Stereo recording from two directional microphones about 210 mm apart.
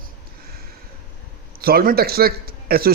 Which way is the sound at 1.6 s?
45° right (ahead or behind).